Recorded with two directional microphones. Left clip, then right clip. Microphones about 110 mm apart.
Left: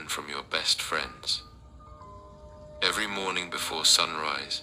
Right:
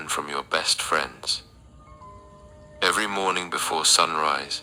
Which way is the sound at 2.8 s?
45° right (ahead or behind).